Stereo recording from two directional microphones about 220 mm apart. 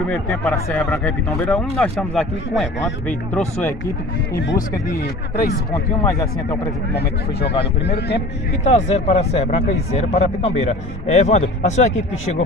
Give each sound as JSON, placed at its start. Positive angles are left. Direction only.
{"t": 0.1, "sound": "speech", "side_deg": 5}
{"t": 4.6, "sound": "speech", "side_deg": 40}
{"t": 6.0, "sound": "speech", "side_deg": 10}
{"t": 7.0, "sound": "speech", "side_deg": 50}
{"t": 8.6, "sound": "speech", "side_deg": 30}